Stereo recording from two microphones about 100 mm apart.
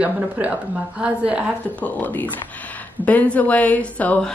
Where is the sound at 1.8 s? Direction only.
15° left (ahead or behind).